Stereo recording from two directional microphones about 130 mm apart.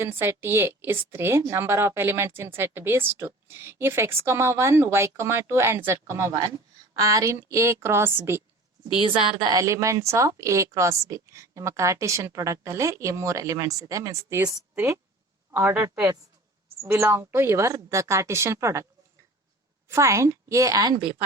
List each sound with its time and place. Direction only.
0.0 s a woman's voice: 15° right (ahead or behind)
9.0 s a woman's voice: 40° right (ahead or behind); by 18.9 s 20° right (ahead or behind)
19.9 s a woman's voice: 20° right (ahead or behind)